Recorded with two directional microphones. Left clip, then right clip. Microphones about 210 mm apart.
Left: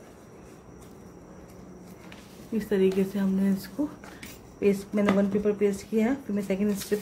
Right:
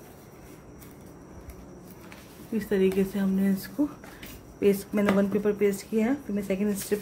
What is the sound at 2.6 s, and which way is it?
Speech, 10° right (ahead or behind).